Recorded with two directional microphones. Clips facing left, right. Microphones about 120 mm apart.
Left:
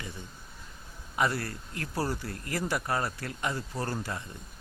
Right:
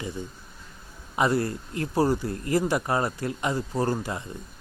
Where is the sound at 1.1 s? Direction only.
20° right (ahead or behind).